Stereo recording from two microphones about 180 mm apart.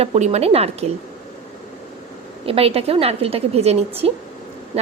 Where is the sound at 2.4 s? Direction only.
30° right (ahead or behind).